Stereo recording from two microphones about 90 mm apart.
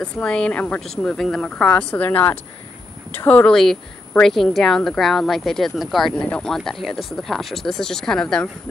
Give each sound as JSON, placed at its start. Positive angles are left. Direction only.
{"t": 0.0, "sound": "speech", "side_deg": 10}
{"t": 0.7, "sound": "speech", "side_deg": 5}
{"t": 4.2, "sound": "speech", "side_deg": 5}